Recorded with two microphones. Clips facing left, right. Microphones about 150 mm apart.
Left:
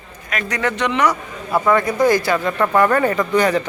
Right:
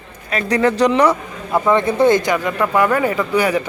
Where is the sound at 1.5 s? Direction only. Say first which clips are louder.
Right 1 dB; 20° right (ahead or behind).